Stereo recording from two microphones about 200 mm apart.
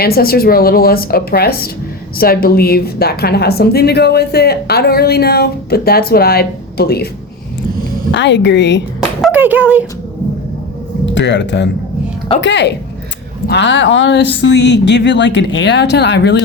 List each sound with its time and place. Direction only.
0.0 s a woman's voice: 50° left (ahead or behind)
8.1 s speech: 60° left (ahead or behind)
9.2 s a sound: 10° right (ahead or behind)
11.0 s speech: 65° left (ahead or behind)